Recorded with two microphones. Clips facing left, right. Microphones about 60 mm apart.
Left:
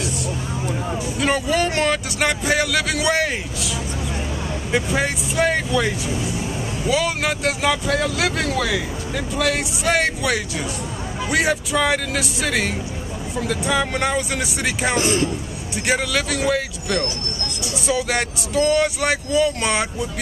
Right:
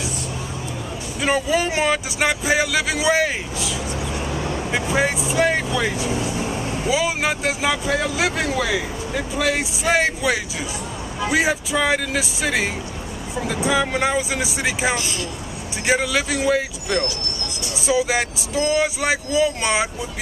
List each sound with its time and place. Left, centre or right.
1.2 s speech: centre
15.0 s speech: left
15.9 s speech: centre